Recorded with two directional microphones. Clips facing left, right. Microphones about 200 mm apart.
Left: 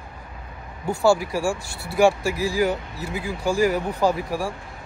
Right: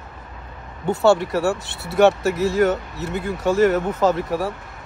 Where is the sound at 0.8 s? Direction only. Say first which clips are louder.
Right 3 dB; 20° right (ahead or behind).